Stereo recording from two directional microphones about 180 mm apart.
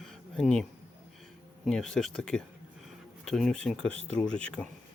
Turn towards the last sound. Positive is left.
turn(degrees=5)  # may be behind; listen again after turning